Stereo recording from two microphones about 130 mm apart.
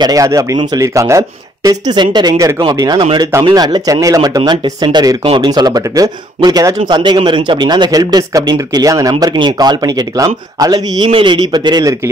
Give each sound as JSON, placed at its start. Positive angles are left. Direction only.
{"t": 0.0, "sound": "speech", "side_deg": -25}
{"t": 3.0, "sound": "speech", "side_deg": -40}
{"t": 6.8, "sound": "speech", "side_deg": -40}
{"t": 11.1, "sound": "speech", "side_deg": -40}